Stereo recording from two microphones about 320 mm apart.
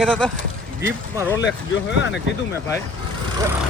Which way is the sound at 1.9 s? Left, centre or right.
Left.